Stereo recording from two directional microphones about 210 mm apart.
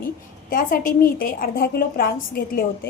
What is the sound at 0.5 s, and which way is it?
A woman's voice, 40° left (ahead or behind).